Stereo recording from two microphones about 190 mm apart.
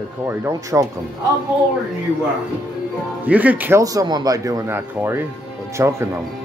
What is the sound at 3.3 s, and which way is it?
Speech, 10° right (ahead or behind).